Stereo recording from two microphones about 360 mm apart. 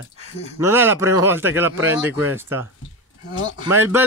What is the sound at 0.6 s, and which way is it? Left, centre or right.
Speech, centre.